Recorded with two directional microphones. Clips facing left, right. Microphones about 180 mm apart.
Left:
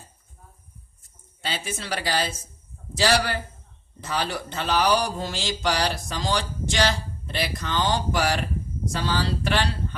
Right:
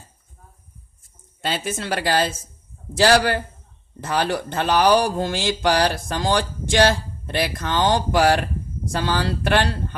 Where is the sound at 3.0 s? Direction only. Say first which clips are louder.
Right 6 dB; 55° right (ahead or behind).